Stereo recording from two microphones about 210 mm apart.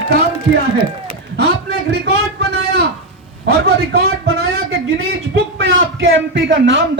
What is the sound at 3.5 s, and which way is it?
Speech, 50° right (ahead or behind).